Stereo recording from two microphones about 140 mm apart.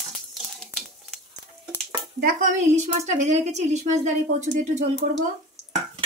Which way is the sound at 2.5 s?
55° right (ahead or behind).